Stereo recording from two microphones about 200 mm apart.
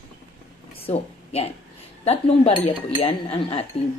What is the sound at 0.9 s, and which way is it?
A woman's voice, 30° left (ahead or behind).